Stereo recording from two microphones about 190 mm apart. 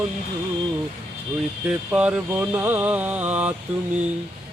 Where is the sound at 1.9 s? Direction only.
5° right (ahead or behind).